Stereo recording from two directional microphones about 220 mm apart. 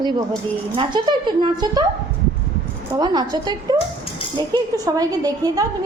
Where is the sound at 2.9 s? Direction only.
20° right (ahead or behind).